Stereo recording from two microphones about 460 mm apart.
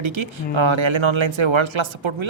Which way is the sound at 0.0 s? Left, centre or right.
Right.